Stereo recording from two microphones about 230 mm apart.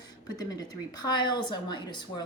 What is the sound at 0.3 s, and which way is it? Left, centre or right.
Speech, centre.